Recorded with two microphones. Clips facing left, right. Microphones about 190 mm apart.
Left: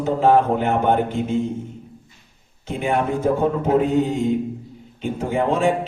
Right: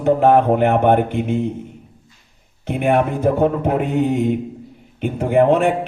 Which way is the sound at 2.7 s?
65° right (ahead or behind).